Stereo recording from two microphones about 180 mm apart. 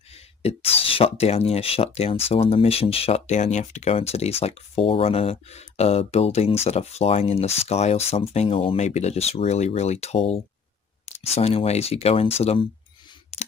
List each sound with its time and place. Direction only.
0.1 s speech: 35° left (ahead or behind)
13.3 s camera: 35° left (ahead or behind)